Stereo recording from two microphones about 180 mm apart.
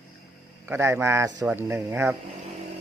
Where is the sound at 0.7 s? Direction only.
15° right (ahead or behind).